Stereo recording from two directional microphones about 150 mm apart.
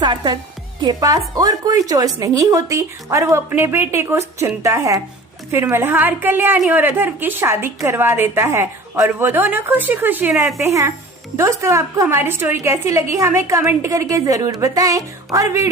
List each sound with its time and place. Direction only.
0.0 s a woman's voice: 30° right (ahead or behind)